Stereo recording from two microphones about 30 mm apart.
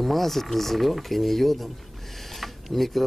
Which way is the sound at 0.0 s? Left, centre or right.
Centre.